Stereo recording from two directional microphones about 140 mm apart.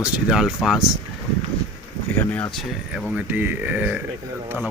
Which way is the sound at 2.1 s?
10° left (ahead or behind).